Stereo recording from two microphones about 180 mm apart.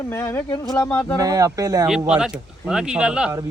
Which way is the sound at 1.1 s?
20° right (ahead or behind).